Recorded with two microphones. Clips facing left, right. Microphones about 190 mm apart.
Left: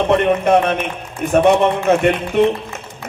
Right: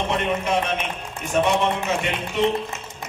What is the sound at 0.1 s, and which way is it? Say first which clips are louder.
A man's voice: left 11 dB; 60° left (ahead or behind).